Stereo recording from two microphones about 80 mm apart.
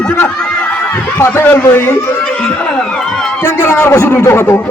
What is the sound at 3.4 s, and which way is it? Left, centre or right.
A man's voice, left.